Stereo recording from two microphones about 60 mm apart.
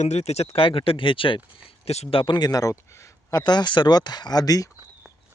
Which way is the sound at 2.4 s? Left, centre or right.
Left.